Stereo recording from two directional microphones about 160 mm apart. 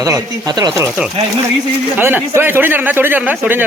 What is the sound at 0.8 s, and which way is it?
Speech, 15° right (ahead or behind).